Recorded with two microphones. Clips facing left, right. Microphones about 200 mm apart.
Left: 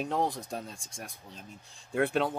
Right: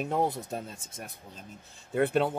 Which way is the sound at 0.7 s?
20° right (ahead or behind).